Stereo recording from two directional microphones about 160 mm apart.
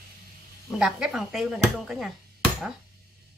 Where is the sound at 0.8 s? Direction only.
5° right (ahead or behind).